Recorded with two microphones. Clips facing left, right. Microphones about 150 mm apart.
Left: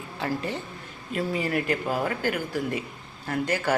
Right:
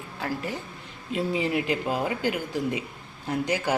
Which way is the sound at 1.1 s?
20° right (ahead or behind).